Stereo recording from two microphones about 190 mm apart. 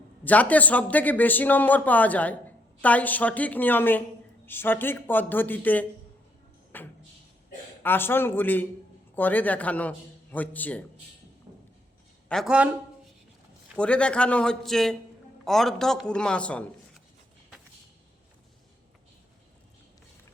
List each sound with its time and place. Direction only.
0.3 s a man's voice: 10° left (ahead or behind)
6.7 s a sound: 10° left (ahead or behind)
7.8 s a man's voice: 10° left (ahead or behind)
12.3 s a man's voice: centre (ahead or behind)
13.7 s a man's voice: 5° left (ahead or behind)